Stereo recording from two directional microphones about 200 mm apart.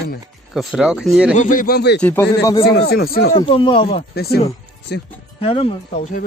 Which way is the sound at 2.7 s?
50° left (ahead or behind).